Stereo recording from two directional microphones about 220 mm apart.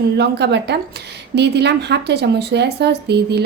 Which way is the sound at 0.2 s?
50° right (ahead or behind).